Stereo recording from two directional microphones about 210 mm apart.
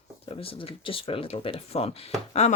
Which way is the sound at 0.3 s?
25° left (ahead or behind).